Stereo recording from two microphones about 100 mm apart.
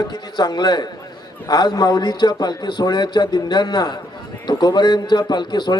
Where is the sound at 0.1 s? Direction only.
45° left (ahead or behind).